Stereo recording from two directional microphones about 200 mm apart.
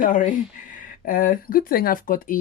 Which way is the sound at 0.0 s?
40° left (ahead or behind).